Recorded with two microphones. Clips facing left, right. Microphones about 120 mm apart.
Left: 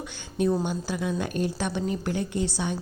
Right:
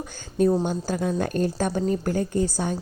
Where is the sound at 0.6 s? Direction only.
40° right (ahead or behind).